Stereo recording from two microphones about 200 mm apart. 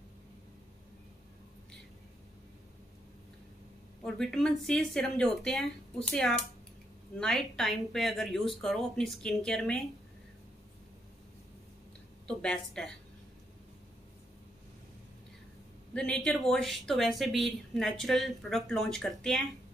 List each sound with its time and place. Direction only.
4.0 s speech: 5° left (ahead or behind)
12.3 s speech: 5° left (ahead or behind)
15.9 s a man's voice: 5° left (ahead or behind)